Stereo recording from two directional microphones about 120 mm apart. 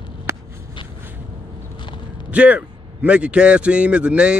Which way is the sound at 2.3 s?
10° right (ahead or behind).